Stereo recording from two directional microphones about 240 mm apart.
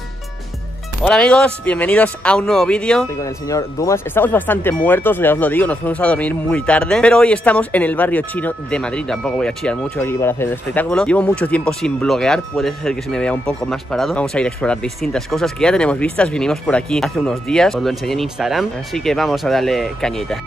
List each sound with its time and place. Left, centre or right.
1.0 s speech: centre